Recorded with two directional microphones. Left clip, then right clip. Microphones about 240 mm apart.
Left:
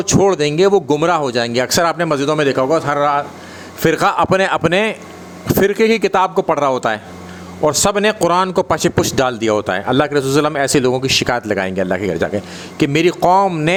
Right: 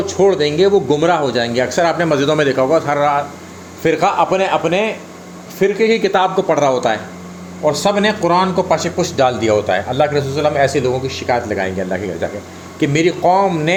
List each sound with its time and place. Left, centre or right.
0.0 s speech: left; by 3.2 s centre
3.8 s speech: left